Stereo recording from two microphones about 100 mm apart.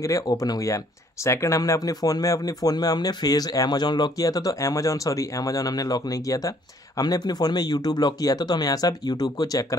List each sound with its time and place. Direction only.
0.0 s speech: 35° left (ahead or behind)